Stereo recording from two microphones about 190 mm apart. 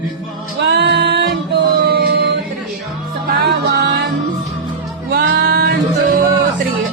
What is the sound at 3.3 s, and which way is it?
Music, 60° right (ahead or behind).